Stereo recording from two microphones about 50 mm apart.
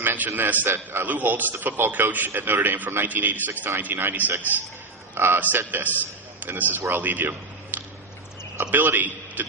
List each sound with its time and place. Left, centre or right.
0.0 s a man's voice: right
5.1 s a man's voice: right
5.4 s a man's voice: right
6.9 s a sound: right
8.7 s a man's voice: right